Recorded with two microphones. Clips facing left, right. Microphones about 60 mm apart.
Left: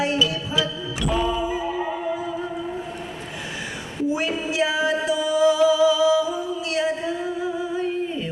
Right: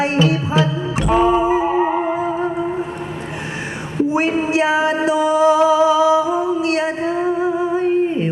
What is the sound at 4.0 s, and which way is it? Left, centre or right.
Music, right.